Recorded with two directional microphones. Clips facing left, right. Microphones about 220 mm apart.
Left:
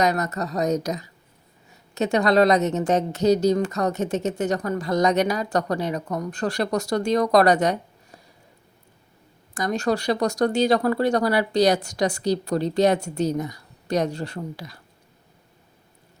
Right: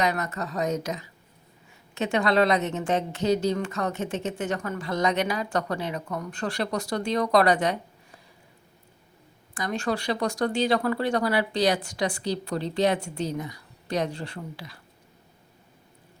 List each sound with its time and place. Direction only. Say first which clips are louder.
0.0 s a woman's voice: left 4 dB; 40° left (ahead or behind)
9.6 s a woman's voice: left 5 dB; 40° left (ahead or behind)